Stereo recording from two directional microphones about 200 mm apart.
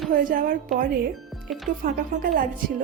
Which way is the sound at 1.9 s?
50° right (ahead or behind).